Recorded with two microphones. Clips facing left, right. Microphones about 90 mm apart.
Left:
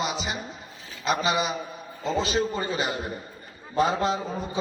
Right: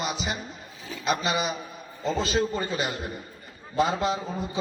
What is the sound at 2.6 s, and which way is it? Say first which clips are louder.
Speech: left 1 dB; 20° left (ahead or behind).